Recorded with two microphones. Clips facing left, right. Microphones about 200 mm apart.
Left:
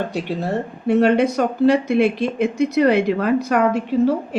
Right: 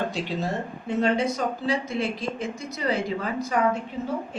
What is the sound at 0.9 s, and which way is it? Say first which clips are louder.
Speech: left 8 dB; 70° left (ahead or behind).